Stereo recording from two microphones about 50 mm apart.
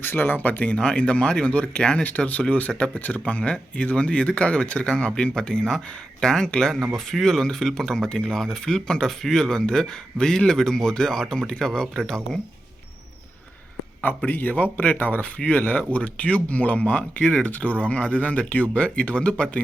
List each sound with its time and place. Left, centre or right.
0.0 s a man's voice: left; by 12.4 s centre
14.3 s speech: left